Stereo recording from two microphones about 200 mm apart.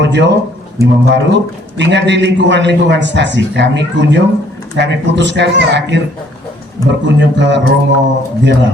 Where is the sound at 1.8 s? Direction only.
60° right (ahead or behind).